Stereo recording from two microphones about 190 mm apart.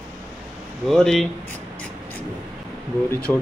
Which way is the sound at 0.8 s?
Centre (ahead or behind).